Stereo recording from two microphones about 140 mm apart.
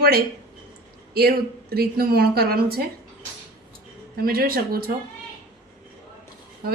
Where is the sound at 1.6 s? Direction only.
90° right.